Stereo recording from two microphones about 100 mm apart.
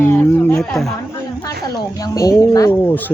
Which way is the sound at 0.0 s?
20° left (ahead or behind).